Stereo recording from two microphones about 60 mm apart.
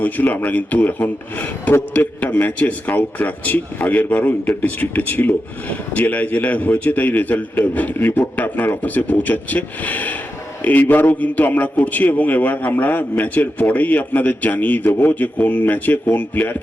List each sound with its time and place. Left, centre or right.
0.0 s speech: left